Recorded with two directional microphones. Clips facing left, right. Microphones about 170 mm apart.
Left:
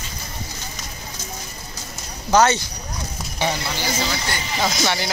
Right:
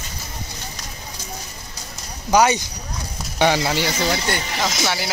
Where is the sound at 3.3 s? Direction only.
75° right (ahead or behind).